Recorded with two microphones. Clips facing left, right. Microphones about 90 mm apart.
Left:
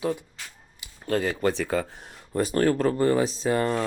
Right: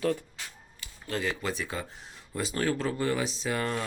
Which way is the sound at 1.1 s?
45° left (ahead or behind).